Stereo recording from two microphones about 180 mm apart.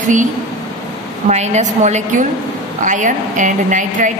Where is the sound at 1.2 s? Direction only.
40° right (ahead or behind).